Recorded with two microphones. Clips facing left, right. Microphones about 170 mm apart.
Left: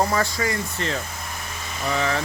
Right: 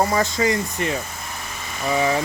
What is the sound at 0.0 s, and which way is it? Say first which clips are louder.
Speech: right 3 dB; 15° right (ahead or behind).